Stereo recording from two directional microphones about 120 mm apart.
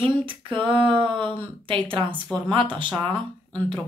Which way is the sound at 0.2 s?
45° right (ahead or behind).